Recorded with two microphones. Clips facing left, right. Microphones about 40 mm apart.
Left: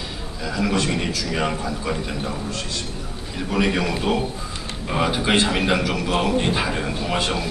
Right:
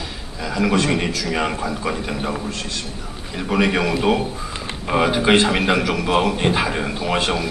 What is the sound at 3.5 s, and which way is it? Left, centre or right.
Speech, centre.